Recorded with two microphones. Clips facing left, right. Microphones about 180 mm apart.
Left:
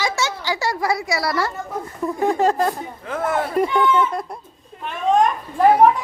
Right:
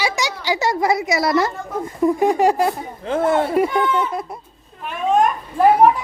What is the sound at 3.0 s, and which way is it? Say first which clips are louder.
Speech: right 5 dB; 25° right (ahead or behind).